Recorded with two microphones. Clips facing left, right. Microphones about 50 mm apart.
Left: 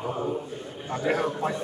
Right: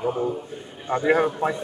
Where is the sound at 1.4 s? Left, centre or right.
Right.